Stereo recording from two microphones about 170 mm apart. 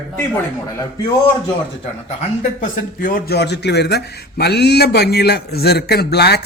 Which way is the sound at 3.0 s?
60° left (ahead or behind).